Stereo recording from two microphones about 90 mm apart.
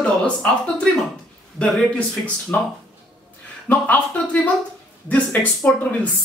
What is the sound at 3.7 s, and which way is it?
Speech, 15° left (ahead or behind).